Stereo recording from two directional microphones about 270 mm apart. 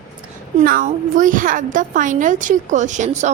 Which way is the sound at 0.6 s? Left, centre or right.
Right.